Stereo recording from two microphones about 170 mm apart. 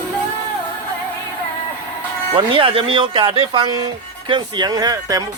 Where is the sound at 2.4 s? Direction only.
30° right (ahead or behind).